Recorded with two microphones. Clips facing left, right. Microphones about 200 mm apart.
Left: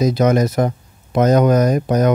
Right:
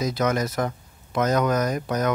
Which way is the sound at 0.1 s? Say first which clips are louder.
Left 8 dB; 20° left (ahead or behind).